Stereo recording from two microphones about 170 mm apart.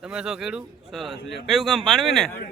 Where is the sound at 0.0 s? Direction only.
5° right (ahead or behind).